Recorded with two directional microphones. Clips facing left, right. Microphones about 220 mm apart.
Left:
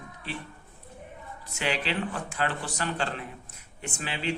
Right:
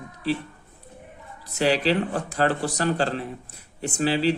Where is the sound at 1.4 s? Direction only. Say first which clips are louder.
Right 9 dB; 35° right (ahead or behind).